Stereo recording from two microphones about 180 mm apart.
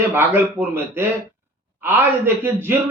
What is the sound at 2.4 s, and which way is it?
Speech, 10° right (ahead or behind).